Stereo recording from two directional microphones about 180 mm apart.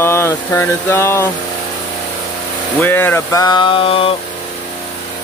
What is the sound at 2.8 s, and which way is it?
Speech, 10° left (ahead or behind).